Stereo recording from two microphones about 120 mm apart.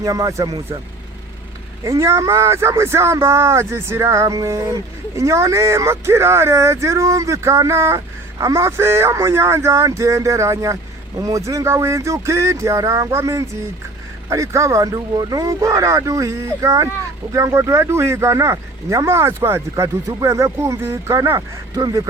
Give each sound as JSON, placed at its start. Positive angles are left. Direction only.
{"t": 0.0, "sound": "speech", "side_deg": -30}
{"t": 1.8, "sound": "speech", "side_deg": -25}